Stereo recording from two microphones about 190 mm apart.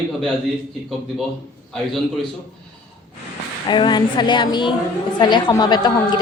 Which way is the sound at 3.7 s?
25° left (ahead or behind).